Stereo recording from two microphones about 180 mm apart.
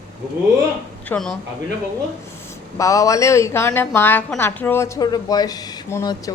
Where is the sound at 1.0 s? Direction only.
5° left (ahead or behind).